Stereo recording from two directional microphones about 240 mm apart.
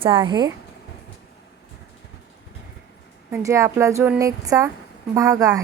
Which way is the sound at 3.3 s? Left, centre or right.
Centre.